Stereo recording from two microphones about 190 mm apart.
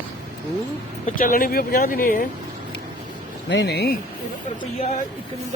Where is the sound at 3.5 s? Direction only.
65° left (ahead or behind).